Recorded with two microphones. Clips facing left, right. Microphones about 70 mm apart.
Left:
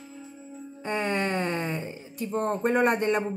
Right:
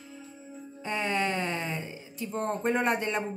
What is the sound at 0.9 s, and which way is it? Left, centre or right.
Speech, left.